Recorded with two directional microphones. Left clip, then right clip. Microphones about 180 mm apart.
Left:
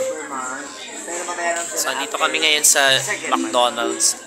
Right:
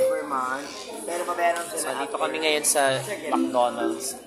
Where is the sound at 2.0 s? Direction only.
10° right (ahead or behind).